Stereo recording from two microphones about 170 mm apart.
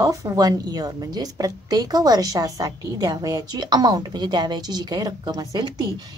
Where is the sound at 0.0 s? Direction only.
20° right (ahead or behind).